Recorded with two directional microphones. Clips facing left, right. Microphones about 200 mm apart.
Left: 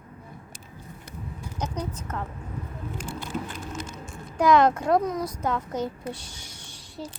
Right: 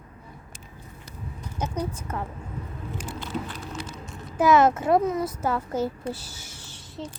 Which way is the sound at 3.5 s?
45° left (ahead or behind).